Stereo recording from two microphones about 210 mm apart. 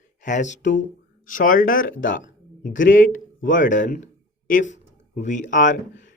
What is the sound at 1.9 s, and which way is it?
Speech, 65° left (ahead or behind).